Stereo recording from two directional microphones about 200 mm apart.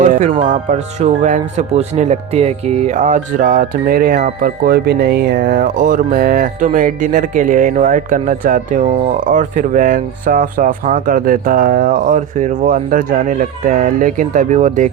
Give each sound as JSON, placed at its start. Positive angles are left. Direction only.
{"t": 0.0, "sound": "music", "side_deg": -35}
{"t": 0.5, "sound": "speech", "side_deg": -35}